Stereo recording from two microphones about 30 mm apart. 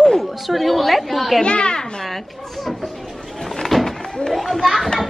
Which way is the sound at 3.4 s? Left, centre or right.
Centre.